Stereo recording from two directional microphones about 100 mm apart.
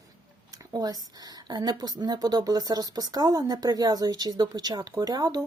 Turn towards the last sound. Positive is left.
turn(degrees=-40)  # may be behind; listen again after turning